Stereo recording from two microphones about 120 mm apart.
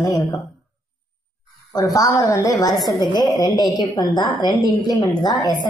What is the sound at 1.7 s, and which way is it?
A woman's voice, 30° left (ahead or behind).